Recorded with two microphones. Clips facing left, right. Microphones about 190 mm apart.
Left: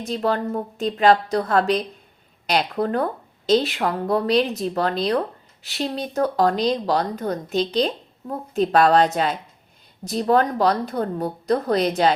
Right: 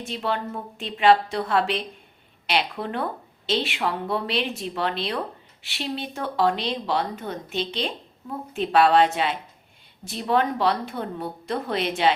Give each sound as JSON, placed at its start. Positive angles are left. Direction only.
{"t": 0.0, "sound": "a woman's voice", "side_deg": 40}